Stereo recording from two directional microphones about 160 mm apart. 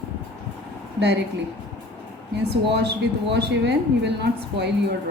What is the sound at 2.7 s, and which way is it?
A woman's voice, 90° right.